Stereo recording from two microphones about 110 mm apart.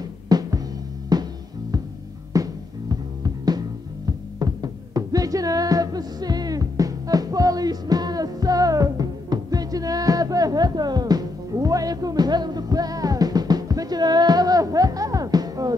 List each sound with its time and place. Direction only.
0.3 s music: 35° right (ahead or behind)
2.3 s music: 30° right (ahead or behind)